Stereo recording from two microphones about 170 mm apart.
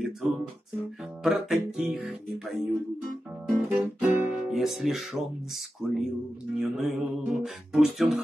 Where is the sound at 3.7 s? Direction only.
10° right (ahead or behind).